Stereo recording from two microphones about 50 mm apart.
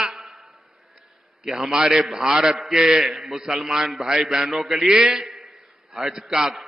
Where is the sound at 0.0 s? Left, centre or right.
Centre.